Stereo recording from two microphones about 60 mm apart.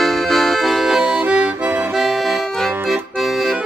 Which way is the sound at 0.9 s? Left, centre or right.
Right.